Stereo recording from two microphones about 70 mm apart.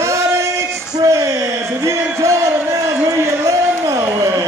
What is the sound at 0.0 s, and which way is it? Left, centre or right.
Singing, right.